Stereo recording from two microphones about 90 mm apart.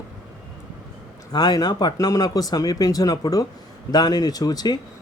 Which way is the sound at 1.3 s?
50° left (ahead or behind).